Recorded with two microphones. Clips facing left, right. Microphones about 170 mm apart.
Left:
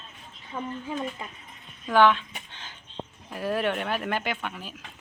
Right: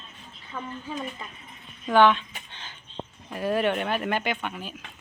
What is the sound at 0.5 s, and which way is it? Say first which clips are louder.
Speech: left 2 dB; 15° left (ahead or behind).